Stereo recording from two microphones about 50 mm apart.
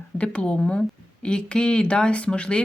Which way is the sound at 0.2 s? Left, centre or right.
Left.